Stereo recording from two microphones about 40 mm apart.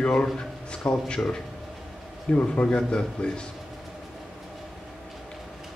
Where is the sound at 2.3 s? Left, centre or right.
Left.